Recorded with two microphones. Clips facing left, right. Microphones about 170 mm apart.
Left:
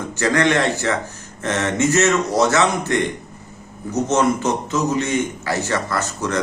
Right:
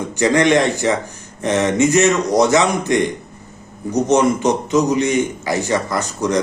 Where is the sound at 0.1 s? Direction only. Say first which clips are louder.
Right 4 dB; 15° right (ahead or behind).